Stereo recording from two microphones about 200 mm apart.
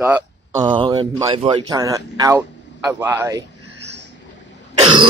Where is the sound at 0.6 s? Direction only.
25° right (ahead or behind).